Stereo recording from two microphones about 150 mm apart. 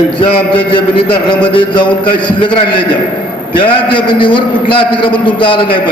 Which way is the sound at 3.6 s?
35° left (ahead or behind).